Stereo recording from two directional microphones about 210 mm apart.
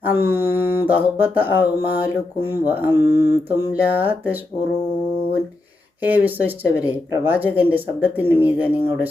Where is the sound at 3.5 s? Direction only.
15° left (ahead or behind).